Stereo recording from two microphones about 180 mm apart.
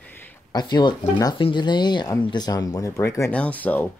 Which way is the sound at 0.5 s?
25° left (ahead or behind).